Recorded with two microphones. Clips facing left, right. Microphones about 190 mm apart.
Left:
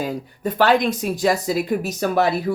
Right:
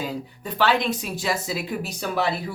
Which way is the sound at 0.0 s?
50° left (ahead or behind).